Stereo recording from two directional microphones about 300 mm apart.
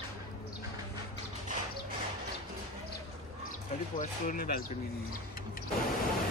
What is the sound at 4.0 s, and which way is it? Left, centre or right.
Speech, left.